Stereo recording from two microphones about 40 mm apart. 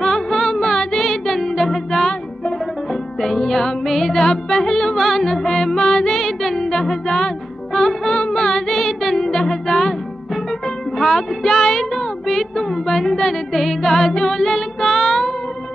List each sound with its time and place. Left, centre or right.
0.0 s music: centre
11.0 s child singing: centre